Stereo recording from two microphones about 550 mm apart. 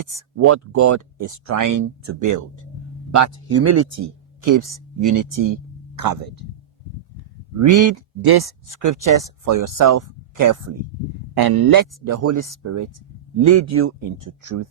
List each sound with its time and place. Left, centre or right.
0.1 s speech: right
7.6 s speech: right